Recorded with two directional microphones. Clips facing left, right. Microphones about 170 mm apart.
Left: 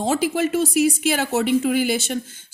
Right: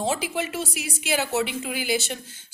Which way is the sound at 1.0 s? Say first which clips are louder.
Left 4 dB; 50° left (ahead or behind).